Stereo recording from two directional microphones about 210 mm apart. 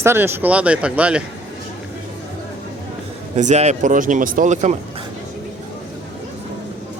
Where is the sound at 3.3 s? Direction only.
35° right (ahead or behind).